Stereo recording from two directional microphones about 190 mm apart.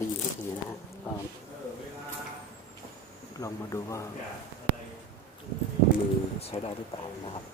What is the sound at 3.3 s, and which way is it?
Speech, 15° left (ahead or behind).